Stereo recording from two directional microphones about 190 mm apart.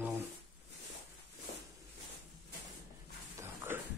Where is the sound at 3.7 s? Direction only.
10° right (ahead or behind).